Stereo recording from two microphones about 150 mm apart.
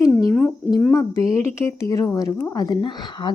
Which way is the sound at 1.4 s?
15° left (ahead or behind).